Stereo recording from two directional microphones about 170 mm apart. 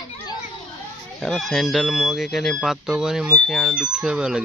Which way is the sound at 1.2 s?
Centre (ahead or behind).